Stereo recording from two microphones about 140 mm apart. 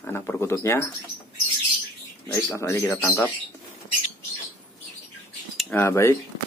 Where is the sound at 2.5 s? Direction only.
20° left (ahead or behind).